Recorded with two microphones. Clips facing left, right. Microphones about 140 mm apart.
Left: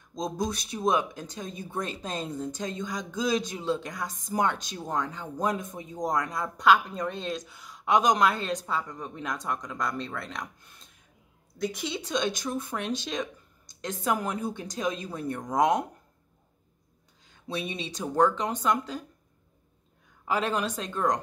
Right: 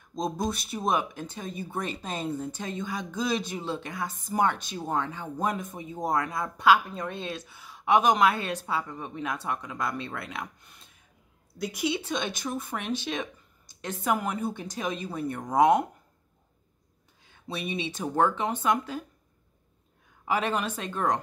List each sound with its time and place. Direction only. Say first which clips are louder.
0.1 s speech: right 1 dB; 5° right (ahead or behind)
18.2 s speech: left 1 dB; 5° right (ahead or behind)
20.2 s speech: even; 5° right (ahead or behind)